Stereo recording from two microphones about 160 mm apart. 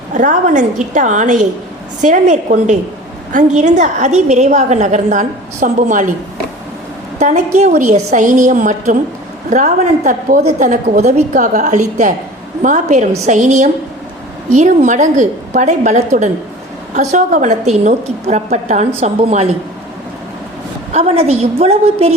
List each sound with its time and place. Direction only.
0.1 s a woman's voice: 50° right (ahead or behind)
7.2 s a woman's voice: 45° right (ahead or behind)
20.9 s a woman's voice: 40° right (ahead or behind)